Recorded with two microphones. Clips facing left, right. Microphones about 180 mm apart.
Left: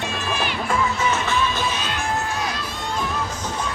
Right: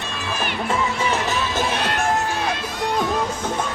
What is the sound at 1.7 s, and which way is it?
Music, 60° right (ahead or behind).